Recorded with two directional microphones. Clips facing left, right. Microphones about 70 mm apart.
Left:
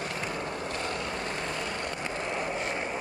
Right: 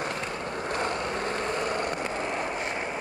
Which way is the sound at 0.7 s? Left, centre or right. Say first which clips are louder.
Right 4 dB; right.